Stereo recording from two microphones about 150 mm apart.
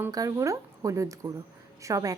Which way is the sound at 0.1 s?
25° right (ahead or behind).